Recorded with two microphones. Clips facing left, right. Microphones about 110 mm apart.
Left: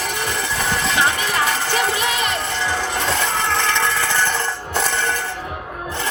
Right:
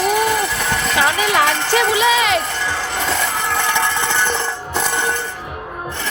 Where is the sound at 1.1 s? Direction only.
90° right.